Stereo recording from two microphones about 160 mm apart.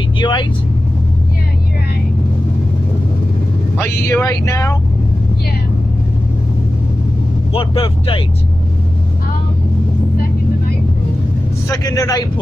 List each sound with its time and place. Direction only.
0.2 s speech: 30° left (ahead or behind)
3.7 s speech: 15° left (ahead or behind)
7.5 s speech: 35° left (ahead or behind)
11.7 s speech: 20° left (ahead or behind)